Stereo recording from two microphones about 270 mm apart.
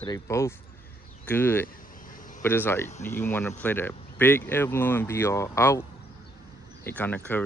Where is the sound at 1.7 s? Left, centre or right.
Left.